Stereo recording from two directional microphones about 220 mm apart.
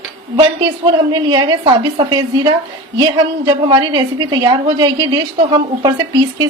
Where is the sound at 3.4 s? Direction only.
20° right (ahead or behind).